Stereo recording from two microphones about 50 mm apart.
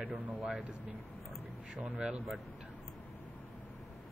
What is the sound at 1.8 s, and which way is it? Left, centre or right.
Speech, right.